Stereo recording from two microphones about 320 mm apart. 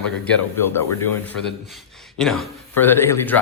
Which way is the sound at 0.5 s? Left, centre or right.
Centre.